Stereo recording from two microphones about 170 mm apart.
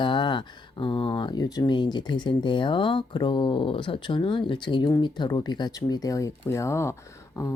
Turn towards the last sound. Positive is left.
turn(degrees=15)  # may be behind; listen again after turning